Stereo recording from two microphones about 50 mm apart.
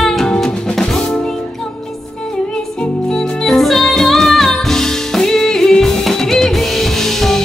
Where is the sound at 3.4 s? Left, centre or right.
Centre.